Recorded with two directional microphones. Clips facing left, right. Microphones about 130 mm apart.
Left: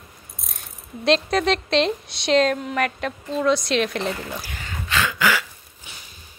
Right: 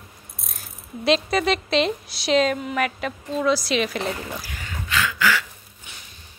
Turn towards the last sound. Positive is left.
turn(degrees=20)  # may be behind; listen again after turning